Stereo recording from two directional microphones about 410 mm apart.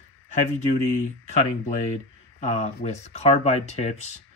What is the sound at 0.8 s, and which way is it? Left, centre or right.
Speech, centre.